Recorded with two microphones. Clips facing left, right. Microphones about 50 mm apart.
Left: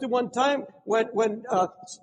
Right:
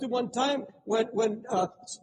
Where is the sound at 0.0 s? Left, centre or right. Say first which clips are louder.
Left 4 dB; left.